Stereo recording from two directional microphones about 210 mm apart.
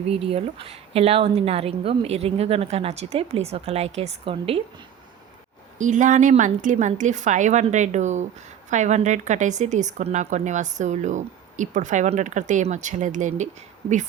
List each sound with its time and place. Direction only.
0.1 s a woman's voice: 30° right (ahead or behind)
5.8 s a woman's voice: 35° right (ahead or behind)